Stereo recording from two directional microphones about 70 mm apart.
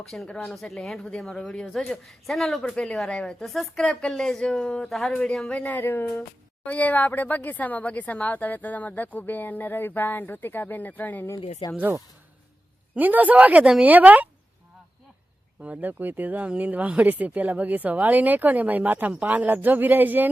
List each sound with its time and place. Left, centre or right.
0.0 s speech: centre
3.4 s speech: centre
5.5 s speech: left
13.0 s speech: right
15.6 s speech: right